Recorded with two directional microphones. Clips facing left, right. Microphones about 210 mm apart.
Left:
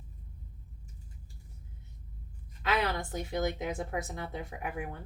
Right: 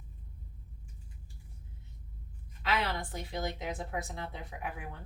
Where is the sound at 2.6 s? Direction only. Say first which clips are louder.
Left 2 dB; 45° left (ahead or behind).